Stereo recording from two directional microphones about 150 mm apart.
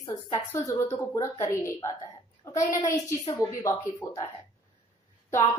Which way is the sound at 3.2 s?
30° left (ahead or behind).